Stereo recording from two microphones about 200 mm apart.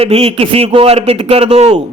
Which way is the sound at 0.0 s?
30° right (ahead or behind).